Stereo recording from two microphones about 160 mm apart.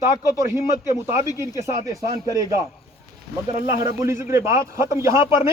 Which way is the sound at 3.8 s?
20° right (ahead or behind).